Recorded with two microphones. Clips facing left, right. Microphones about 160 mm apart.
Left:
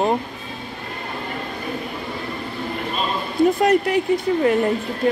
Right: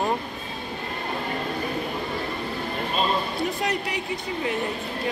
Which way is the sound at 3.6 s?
55° left (ahead or behind).